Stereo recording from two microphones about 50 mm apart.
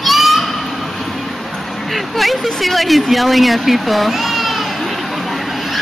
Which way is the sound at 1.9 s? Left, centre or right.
Centre.